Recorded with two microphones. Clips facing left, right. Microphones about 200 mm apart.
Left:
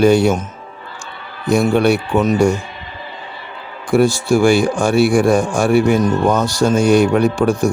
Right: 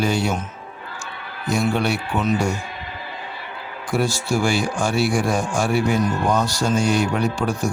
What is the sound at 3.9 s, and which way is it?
A man's voice, 60° left (ahead or behind).